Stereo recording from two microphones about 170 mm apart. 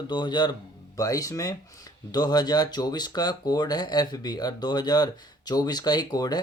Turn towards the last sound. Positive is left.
turn(degrees=25)  # may be behind; listen again after turning